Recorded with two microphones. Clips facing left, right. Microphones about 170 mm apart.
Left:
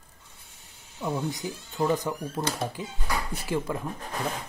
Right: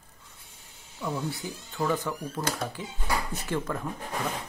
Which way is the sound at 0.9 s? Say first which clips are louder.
Left 2 dB; 15° left (ahead or behind).